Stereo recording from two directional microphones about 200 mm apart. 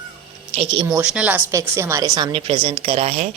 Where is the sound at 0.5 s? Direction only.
30° right (ahead or behind).